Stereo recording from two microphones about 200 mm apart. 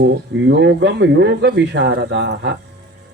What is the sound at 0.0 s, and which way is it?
Speech, 60° right (ahead or behind).